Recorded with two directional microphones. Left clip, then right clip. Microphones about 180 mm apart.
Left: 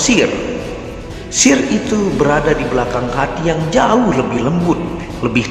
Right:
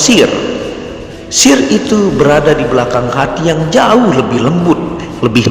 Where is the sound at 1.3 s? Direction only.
30° right (ahead or behind).